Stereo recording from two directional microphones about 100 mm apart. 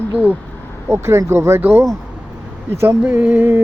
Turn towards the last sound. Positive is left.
turn(degrees=-15)  # may be behind; listen again after turning